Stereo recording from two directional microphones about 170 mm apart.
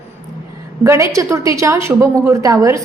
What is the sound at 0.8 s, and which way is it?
A woman's voice, 15° right (ahead or behind).